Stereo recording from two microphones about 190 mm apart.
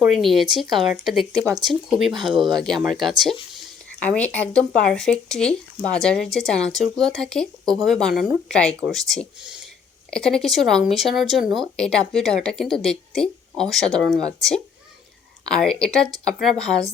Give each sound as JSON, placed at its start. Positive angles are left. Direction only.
{"t": 0.0, "sound": "speech", "side_deg": 0}
{"t": 15.4, "sound": "speech", "side_deg": 5}